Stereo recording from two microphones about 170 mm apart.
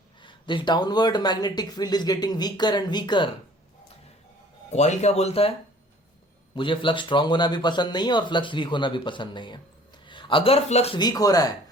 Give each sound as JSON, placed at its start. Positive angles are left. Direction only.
{"t": 0.2, "sound": "speech", "side_deg": 30}
{"t": 4.7, "sound": "speech", "side_deg": 40}
{"t": 6.6, "sound": "a man's voice", "side_deg": 30}
{"t": 10.9, "sound": "speech", "side_deg": 25}